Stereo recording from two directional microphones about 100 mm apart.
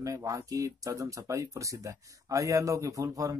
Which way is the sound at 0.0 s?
35° right (ahead or behind).